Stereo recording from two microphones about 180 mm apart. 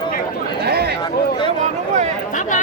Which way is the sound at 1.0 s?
25° left (ahead or behind).